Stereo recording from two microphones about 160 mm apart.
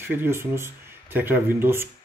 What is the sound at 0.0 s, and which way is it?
Speech, 15° right (ahead or behind).